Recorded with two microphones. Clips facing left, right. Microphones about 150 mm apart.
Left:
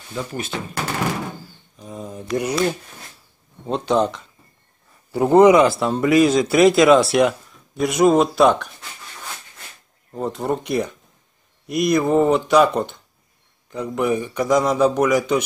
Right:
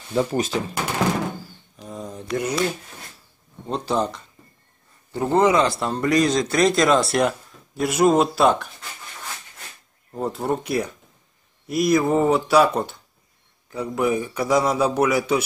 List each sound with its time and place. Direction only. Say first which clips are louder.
0.1 s speech: right 6 dB; 35° right (ahead or behind)
1.8 s a sound: left 1 dB; centre (ahead or behind)
2.1 s a sound: left 3 dB; 15° left (ahead or behind)
3.7 s speech: left 4 dB; centre (ahead or behind)
5.1 s a man's voice: left 6 dB; 15° left (ahead or behind)
5.7 s speech: left 4 dB; centre (ahead or behind)
10.1 s a man's voice: left 1 dB; 5° right (ahead or behind)